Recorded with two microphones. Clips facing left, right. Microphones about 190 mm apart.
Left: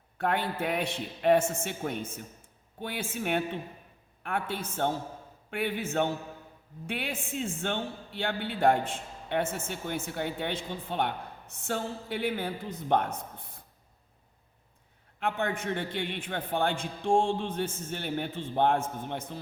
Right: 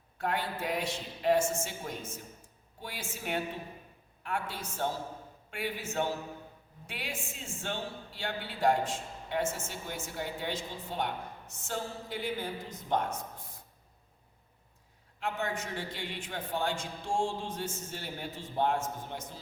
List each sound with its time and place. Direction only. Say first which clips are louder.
0.2 s a woman's voice: left 4 dB; 55° left (ahead or behind)
15.2 s a woman's voice: left 4 dB; 55° left (ahead or behind)